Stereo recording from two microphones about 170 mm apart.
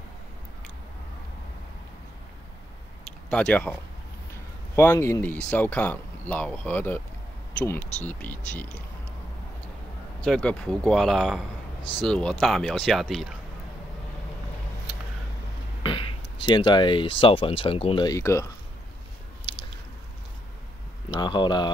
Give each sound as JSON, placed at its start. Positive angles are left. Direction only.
{"t": 3.3, "sound": "speech", "side_deg": 5}
{"t": 4.7, "sound": "speech", "side_deg": 15}
{"t": 10.2, "sound": "speech", "side_deg": 5}
{"t": 15.8, "sound": "a sound", "side_deg": 30}
{"t": 16.5, "sound": "speech", "side_deg": 25}
{"t": 21.2, "sound": "speech", "side_deg": 25}